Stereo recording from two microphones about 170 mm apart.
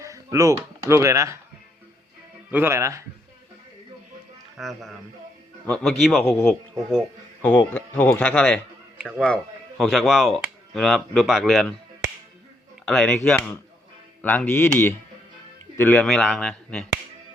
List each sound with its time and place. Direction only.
0.0 s speech: 20° right (ahead or behind)
2.5 s speech: 15° right (ahead or behind)
4.5 s speech: centre (ahead or behind)
6.2 s speech: 15° left (ahead or behind)
12.8 s speech: centre (ahead or behind)